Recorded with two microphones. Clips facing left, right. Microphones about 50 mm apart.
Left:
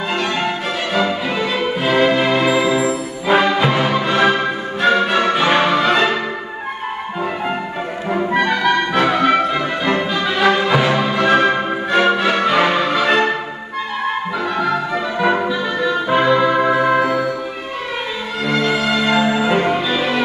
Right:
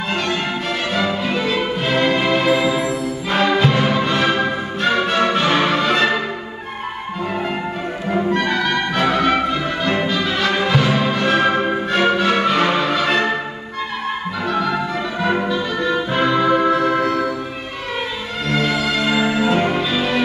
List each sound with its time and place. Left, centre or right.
0.9 s music: centre
8.1 s music: centre
15.1 s music: centre
18.4 s music: centre